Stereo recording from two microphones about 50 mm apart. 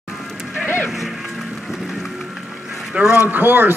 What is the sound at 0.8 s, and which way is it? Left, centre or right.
Music, centre.